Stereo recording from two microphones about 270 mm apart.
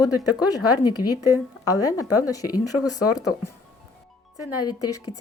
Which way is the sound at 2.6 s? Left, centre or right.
Left.